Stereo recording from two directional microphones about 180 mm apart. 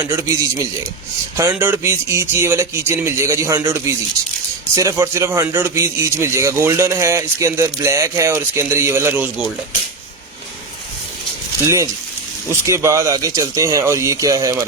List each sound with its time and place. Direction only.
0.0 s a man's voice: 15° right (ahead or behind)
11.6 s a man's voice: 15° right (ahead or behind)